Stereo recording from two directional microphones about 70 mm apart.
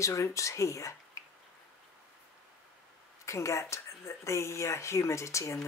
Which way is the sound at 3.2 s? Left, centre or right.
Left.